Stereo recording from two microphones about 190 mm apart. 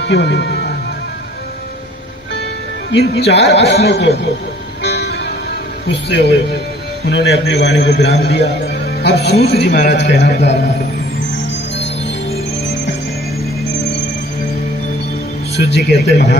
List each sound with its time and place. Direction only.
0.0 s speech: 60° left (ahead or behind)
2.9 s a man's voice: 60° left (ahead or behind)
5.9 s a man's voice: 65° left (ahead or behind)
15.5 s a man's voice: 60° left (ahead or behind)